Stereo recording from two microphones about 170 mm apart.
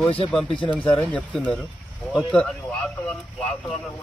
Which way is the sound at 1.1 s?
5° left (ahead or behind).